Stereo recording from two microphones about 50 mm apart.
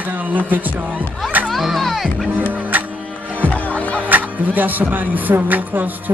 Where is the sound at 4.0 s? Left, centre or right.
Right.